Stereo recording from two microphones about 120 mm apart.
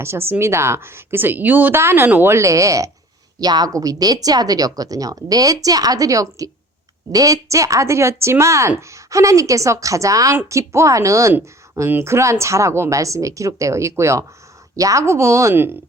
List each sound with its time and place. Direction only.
0.0 s a woman's voice: 20° right (ahead or behind)